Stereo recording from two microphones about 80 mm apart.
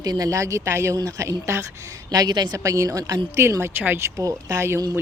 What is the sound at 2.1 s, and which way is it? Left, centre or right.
Speech, right.